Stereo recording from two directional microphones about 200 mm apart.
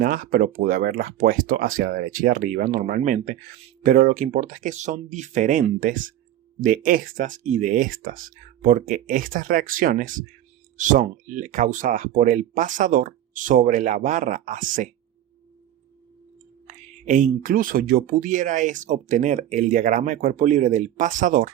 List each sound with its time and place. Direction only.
0.0 s speech: 45° right (ahead or behind)
16.6 s speech: 40° right (ahead or behind)